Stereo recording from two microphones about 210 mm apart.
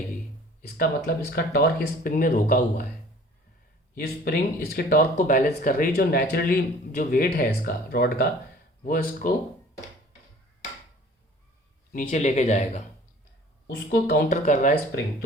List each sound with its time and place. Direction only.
1.3 s speech: 50° left (ahead or behind)
3.9 s speech: 45° left (ahead or behind)
11.9 s speech: 35° left (ahead or behind)
13.7 s speech: 50° left (ahead or behind)